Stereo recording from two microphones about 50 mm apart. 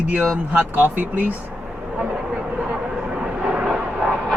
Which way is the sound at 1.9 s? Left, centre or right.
Right.